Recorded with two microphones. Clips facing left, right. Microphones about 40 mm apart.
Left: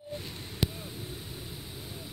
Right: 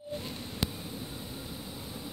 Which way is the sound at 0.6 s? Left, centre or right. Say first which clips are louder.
Left 3 dB; left.